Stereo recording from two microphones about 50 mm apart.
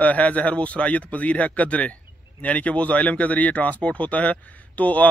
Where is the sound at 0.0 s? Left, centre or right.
Left.